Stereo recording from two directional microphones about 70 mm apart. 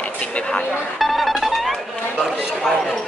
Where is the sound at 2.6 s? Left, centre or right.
Centre.